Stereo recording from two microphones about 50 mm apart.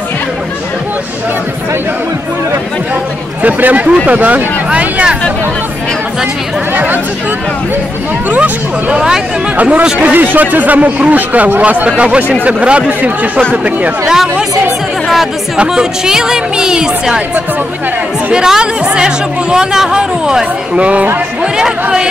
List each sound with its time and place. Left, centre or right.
3.4 s speech: right
6.7 s speech: right
8.3 s speech: right
8.9 s speech: centre
9.6 s speech: right
14.0 s speech: centre
15.5 s speech: centre
18.3 s speech: centre
20.7 s speech: right